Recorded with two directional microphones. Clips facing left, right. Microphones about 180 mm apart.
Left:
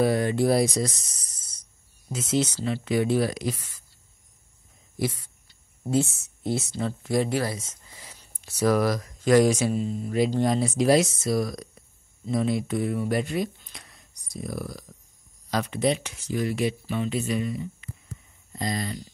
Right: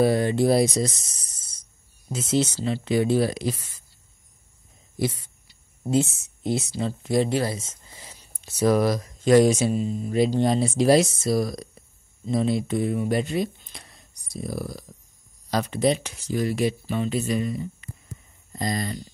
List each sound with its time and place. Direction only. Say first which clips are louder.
0.0 s speech: right 2 dB; 30° right (ahead or behind)
5.5 s speech: right 2 dB; 20° right (ahead or behind); by 18.9 s 40° right (ahead or behind)